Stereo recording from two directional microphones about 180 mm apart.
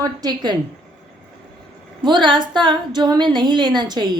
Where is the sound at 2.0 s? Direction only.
25° right (ahead or behind).